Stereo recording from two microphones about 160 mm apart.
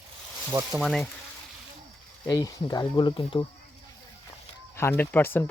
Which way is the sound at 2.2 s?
25° left (ahead or behind).